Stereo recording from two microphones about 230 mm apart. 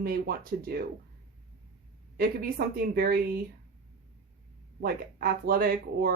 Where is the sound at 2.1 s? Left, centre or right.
Right.